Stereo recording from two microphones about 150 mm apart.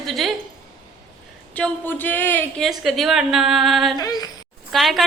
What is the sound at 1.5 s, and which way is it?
Speech, 10° left (ahead or behind).